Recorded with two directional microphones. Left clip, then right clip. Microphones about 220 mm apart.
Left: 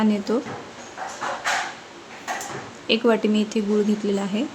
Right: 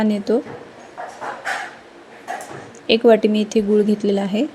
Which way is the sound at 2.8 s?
15° right (ahead or behind).